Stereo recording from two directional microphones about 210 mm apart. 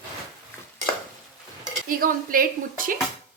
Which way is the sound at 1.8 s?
40° right (ahead or behind).